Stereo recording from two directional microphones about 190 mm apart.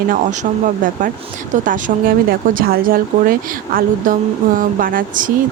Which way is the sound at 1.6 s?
45° right (ahead or behind).